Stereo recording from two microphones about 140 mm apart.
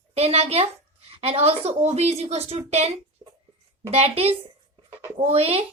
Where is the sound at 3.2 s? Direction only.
35° right (ahead or behind).